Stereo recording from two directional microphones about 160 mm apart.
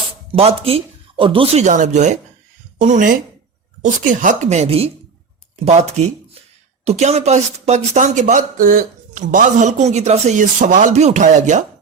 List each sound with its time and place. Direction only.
0.3 s speech: 35° right (ahead or behind)
1.6 s speech: 50° right (ahead or behind)